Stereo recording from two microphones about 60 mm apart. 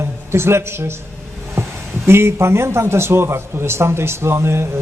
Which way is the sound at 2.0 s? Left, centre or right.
Right.